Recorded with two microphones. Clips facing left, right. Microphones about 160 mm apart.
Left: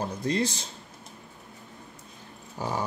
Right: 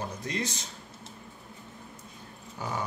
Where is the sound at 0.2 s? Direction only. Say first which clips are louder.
Left 6 dB; 30° left (ahead or behind).